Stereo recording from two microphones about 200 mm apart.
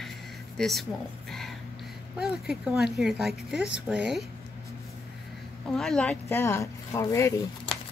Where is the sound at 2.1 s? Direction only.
5° right (ahead or behind).